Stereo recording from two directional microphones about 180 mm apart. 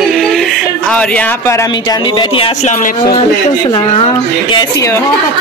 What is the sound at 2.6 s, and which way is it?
Speech, 45° left (ahead or behind).